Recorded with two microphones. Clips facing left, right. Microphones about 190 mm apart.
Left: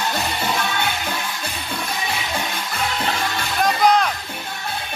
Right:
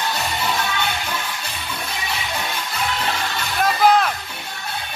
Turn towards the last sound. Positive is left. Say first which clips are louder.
# right 1 dB
turn(degrees=-5)  # may be behind; listen again after turning